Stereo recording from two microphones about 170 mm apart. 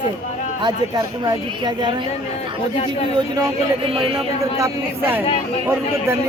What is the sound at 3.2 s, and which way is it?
Speech, 30° right (ahead or behind).